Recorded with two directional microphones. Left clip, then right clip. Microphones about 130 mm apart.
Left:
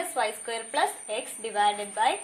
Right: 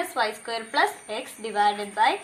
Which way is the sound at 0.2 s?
35° left (ahead or behind).